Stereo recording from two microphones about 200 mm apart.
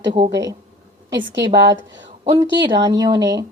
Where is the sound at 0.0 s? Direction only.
25° right (ahead or behind).